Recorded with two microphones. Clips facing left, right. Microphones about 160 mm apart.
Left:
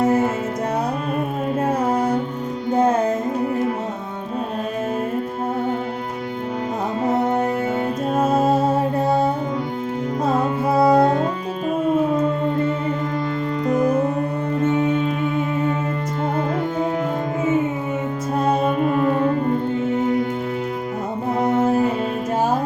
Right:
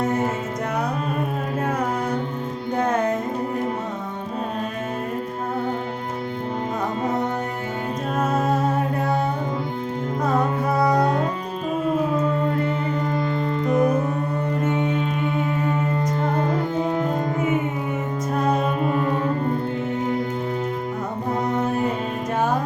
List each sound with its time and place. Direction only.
8.2 s music: 30° left (ahead or behind)
10.7 s music: 25° left (ahead or behind)
13.7 s music: centre (ahead or behind)
18.6 s music: centre (ahead or behind)